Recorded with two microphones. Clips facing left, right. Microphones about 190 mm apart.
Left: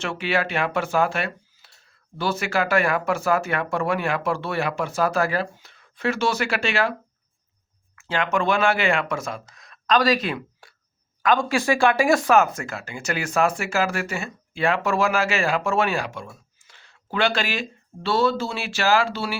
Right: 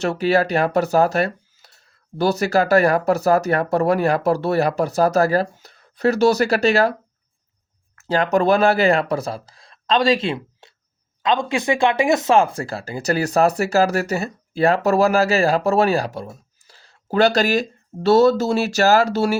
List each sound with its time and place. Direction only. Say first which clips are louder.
0.0 s speech: right 7 dB; 40° right (ahead or behind)
7.9 s speech: right 6 dB; 40° right (ahead or behind)